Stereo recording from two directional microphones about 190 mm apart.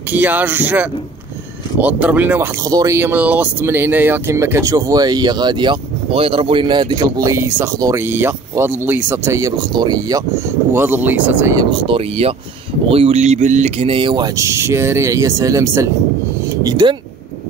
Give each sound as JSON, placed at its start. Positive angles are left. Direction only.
{"t": 0.1, "sound": "speech", "side_deg": -10}
{"t": 11.8, "sound": "speech", "side_deg": -30}